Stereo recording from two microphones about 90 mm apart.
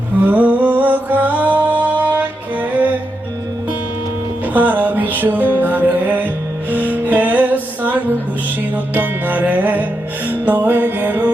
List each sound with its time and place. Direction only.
0.2 s music: 15° right (ahead or behind)
4.5 s music: 20° right (ahead or behind)